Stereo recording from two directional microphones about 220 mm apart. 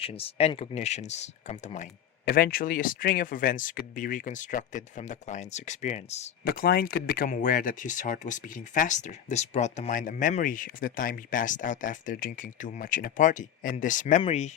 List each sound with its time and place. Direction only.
0.0 s speech: 25° left (ahead or behind)
2.2 s speech: 40° left (ahead or behind)
6.4 s speech: 45° left (ahead or behind)